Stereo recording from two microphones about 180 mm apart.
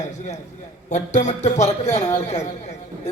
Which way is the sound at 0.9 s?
40° left (ahead or behind).